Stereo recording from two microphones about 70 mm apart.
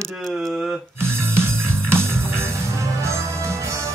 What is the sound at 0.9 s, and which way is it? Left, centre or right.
Music, right.